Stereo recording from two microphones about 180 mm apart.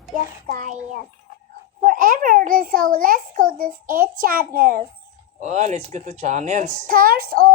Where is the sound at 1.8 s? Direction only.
50° right (ahead or behind).